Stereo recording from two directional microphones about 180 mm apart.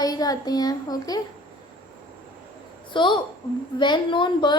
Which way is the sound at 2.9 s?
25° left (ahead or behind).